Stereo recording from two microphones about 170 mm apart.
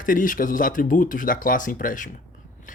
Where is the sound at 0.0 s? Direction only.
50° left (ahead or behind).